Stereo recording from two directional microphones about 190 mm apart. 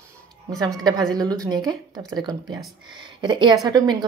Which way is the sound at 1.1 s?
20° right (ahead or behind).